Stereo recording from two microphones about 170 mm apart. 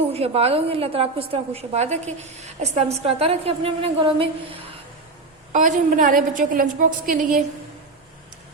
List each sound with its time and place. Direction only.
0.1 s a woman's voice: 35° right (ahead or behind)
5.5 s a woman's voice: 45° right (ahead or behind)